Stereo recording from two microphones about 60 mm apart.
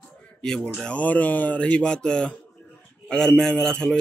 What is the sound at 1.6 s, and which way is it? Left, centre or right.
Speech, centre.